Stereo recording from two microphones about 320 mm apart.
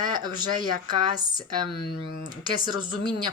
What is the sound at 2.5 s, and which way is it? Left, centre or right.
Speech, centre.